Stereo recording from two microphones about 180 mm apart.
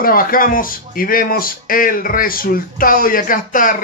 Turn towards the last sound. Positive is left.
turn(degrees=50)  # may be behind; listen again after turning